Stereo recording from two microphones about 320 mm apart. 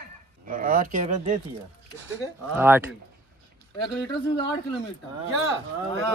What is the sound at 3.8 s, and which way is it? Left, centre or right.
Speech, centre.